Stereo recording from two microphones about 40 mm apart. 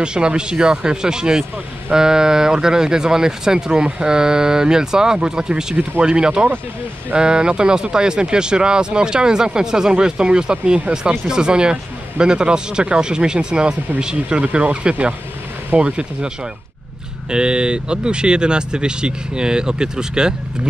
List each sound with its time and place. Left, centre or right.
0.0 s speech: right
17.3 s speech: right